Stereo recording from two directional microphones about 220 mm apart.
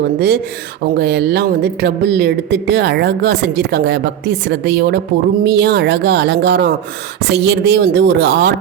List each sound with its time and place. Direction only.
0.8 s speech: 50° right (ahead or behind)